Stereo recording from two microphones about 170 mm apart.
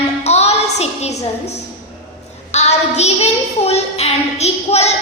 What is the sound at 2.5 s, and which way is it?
A child's voice, 40° left (ahead or behind).